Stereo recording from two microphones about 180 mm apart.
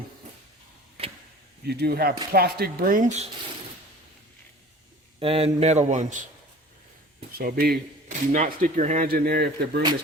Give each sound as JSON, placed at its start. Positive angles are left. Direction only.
{"t": 1.0, "sound": "a sound", "side_deg": -30}
{"t": 1.6, "sound": "speech", "side_deg": -65}
{"t": 5.2, "sound": "speech", "side_deg": -35}
{"t": 7.3, "sound": "speech", "side_deg": -55}
{"t": 8.0, "sound": "speech", "side_deg": -45}